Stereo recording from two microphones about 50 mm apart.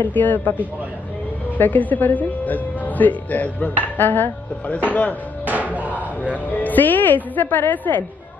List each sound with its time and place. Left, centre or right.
0.1 s speech: left
1.6 s speech: left
5.4 s music: right
6.3 s speech: left